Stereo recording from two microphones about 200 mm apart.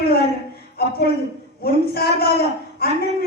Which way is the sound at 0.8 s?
50° left (ahead or behind).